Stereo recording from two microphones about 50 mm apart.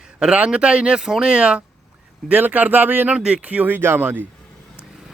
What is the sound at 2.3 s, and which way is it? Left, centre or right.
Speech, right.